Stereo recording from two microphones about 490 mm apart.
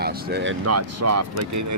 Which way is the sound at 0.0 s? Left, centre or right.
Centre.